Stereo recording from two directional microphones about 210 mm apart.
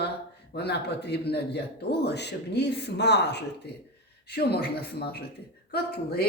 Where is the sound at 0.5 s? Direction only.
50° left (ahead or behind).